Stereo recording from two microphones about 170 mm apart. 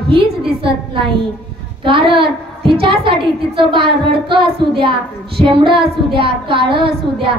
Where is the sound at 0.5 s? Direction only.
30° right (ahead or behind).